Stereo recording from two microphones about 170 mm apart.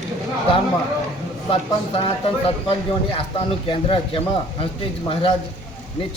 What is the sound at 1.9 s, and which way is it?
A man's voice, 35° left (ahead or behind).